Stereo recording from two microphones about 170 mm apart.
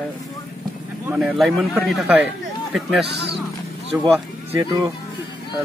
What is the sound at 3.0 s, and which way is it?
Speech, 75° right (ahead or behind).